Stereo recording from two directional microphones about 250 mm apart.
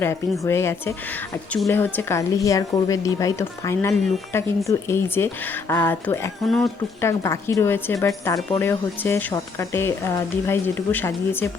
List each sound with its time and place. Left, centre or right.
0.0 s a woman's voice: centre